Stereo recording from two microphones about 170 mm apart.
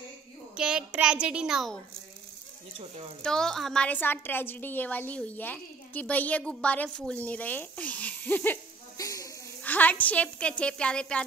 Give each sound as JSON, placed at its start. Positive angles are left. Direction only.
{"t": 0.6, "sound": "a child's voice", "side_deg": -5}
{"t": 3.2, "sound": "a woman's voice", "side_deg": 5}
{"t": 8.9, "sound": "a sound", "side_deg": 20}
{"t": 9.6, "sound": "a woman's voice", "side_deg": 10}